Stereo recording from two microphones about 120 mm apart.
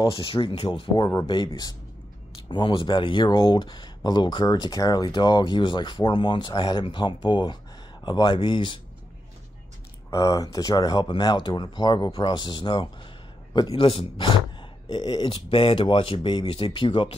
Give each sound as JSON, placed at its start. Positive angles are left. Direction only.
{"t": 0.0, "sound": "speech", "side_deg": 45}
{"t": 0.9, "sound": "speech", "side_deg": 30}
{"t": 1.2, "sound": "speech", "side_deg": 45}
{"t": 10.1, "sound": "speech", "side_deg": 30}
{"t": 13.7, "sound": "speech", "side_deg": 55}